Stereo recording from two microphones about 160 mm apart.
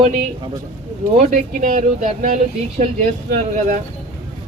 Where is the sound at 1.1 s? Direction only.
55° right (ahead or behind).